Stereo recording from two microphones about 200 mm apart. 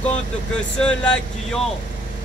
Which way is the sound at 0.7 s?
5° left (ahead or behind).